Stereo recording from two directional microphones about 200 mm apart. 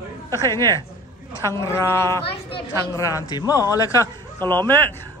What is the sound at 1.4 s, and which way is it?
Speech, 15° left (ahead or behind).